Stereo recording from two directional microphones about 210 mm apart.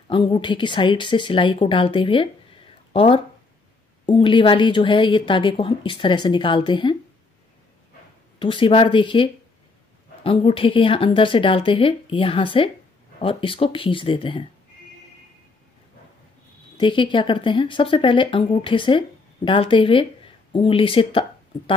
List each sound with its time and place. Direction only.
0.1 s speech: 25° left (ahead or behind)
8.4 s speech: 25° left (ahead or behind)
16.7 s speech: 25° left (ahead or behind)